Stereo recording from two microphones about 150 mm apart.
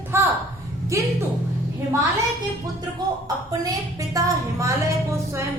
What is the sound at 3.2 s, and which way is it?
A woman's voice, 25° right (ahead or behind).